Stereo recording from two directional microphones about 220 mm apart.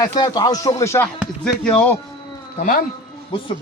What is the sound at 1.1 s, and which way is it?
Speech, centre (ahead or behind).